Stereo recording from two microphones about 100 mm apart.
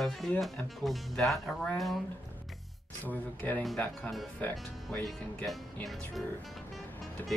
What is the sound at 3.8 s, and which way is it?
Speech, 5° left (ahead or behind).